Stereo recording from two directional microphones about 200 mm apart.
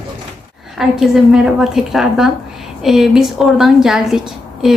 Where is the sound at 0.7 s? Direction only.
Centre (ahead or behind).